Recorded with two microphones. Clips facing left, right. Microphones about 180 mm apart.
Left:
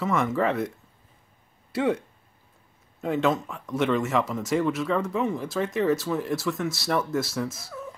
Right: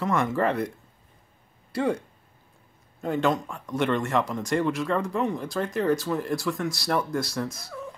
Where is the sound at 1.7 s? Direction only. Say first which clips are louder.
Left 1 dB; centre (ahead or behind).